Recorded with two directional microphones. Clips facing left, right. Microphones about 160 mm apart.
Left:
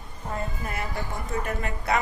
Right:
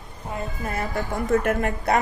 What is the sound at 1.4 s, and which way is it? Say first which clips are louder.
Speech: right 8 dB; 60° right (ahead or behind).